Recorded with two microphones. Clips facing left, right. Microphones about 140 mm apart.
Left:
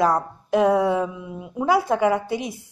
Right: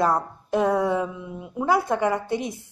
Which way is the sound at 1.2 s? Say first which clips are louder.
Left 2 dB; 20° left (ahead or behind).